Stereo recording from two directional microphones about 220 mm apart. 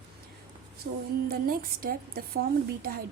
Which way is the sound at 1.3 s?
40° right (ahead or behind).